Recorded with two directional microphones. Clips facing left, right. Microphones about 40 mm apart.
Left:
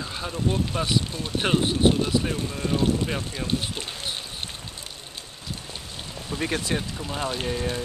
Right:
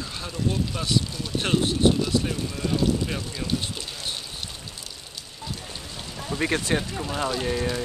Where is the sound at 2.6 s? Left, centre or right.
Left.